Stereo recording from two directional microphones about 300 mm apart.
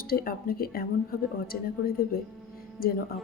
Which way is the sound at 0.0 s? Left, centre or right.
Left.